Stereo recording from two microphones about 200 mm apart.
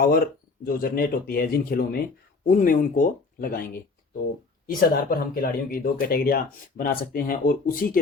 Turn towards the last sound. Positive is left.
turn(degrees=45)  # may be behind; listen again after turning